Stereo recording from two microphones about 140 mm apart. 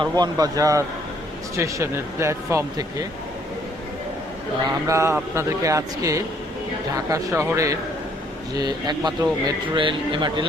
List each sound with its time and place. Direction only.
0.0 s speech: 30° right (ahead or behind)
4.6 s a man's voice: 20° right (ahead or behind)